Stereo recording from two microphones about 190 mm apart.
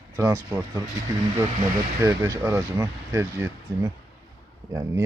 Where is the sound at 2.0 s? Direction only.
15° right (ahead or behind).